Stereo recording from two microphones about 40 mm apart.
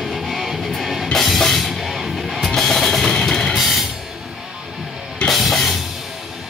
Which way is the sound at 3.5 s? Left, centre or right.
Centre.